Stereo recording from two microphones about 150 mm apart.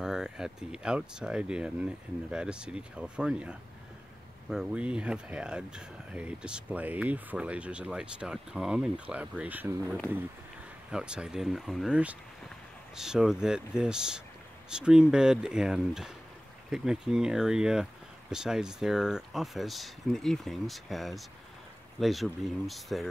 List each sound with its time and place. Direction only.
0.0 s speech: 5° right (ahead or behind)